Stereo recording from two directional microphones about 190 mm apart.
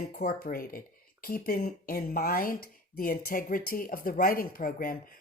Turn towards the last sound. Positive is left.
turn(degrees=50)  # may be behind; listen again after turning